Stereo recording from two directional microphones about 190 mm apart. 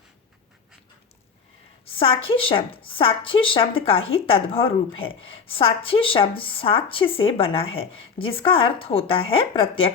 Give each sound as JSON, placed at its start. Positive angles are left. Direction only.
{"t": 1.8, "sound": "a woman's voice", "side_deg": 30}